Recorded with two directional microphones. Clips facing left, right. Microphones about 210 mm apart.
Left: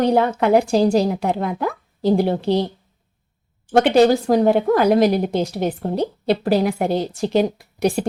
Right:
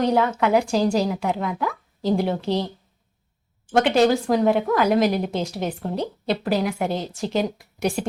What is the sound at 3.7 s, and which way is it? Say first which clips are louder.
Speech: left 4 dB; 35° left (ahead or behind).